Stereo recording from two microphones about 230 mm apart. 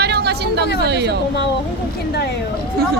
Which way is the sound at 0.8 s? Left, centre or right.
Right.